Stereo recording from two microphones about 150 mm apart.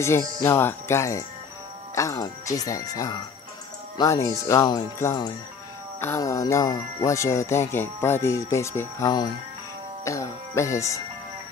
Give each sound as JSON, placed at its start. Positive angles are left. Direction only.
{"t": 0.4, "sound": "speech", "side_deg": 15}